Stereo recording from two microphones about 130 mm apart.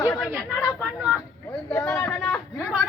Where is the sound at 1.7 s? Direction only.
15° left (ahead or behind).